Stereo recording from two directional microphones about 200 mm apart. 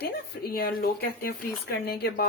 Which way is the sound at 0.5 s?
50° left (ahead or behind).